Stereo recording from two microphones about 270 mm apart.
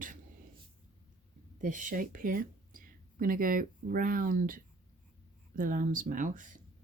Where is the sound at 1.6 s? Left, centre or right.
Right.